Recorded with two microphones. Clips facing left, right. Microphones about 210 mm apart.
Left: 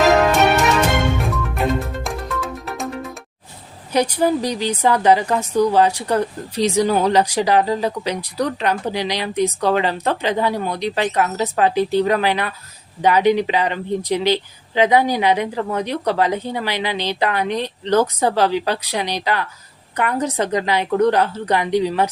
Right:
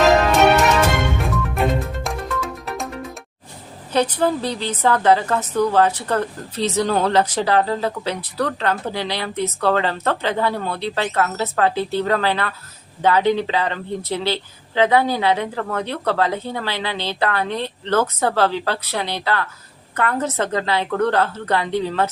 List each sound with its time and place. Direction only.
1.2 s music: centre (ahead or behind)
3.9 s a woman's voice: 10° left (ahead or behind)